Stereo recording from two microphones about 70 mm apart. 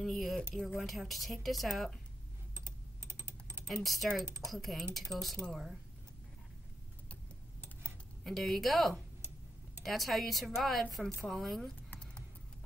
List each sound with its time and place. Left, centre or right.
0.0 s speech: centre
2.5 s typing: right
3.6 s speech: centre
8.3 s speech: centre